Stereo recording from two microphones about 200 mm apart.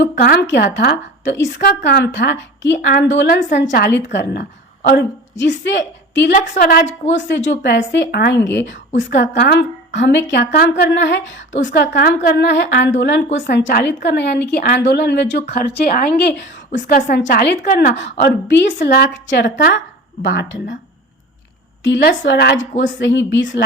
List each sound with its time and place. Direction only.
0.0 s a woman's voice: 50° left (ahead or behind)
6.3 s a woman's voice: 40° left (ahead or behind)
7.1 s a woman's voice: 65° left (ahead or behind)
10.3 s a woman's voice: 50° left (ahead or behind)
11.5 s a woman's voice: 45° left (ahead or behind)
12.5 s a woman's voice: 60° left (ahead or behind)
16.8 s a woman's voice: 50° left (ahead or behind)
17.9 s a woman's voice: 55° left (ahead or behind)
21.8 s a woman's voice: 60° left (ahead or behind)
22.5 s a woman's voice: 40° left (ahead or behind)
23.0 s speech: 65° left (ahead or behind)